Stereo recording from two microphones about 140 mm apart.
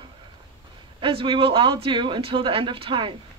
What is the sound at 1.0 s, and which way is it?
Speech, 35° right (ahead or behind).